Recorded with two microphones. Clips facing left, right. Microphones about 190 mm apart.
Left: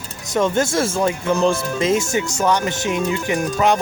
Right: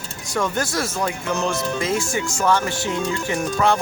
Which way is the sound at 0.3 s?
25° left (ahead or behind).